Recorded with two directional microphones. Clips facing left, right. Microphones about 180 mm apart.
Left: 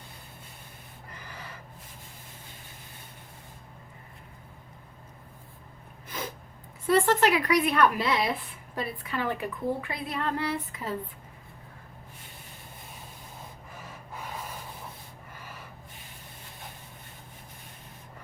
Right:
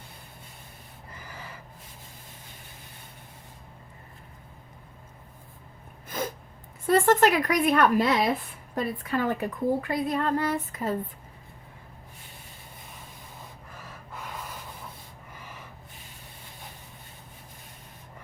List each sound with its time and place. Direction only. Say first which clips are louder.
6.1 s gasp: right 5 dB; 50° right (ahead or behind)
6.8 s a woman's voice: right 2 dB; 50° right (ahead or behind)